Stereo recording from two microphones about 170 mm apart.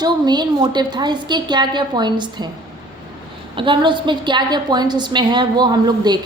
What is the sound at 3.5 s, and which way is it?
A woman's voice, 30° right (ahead or behind).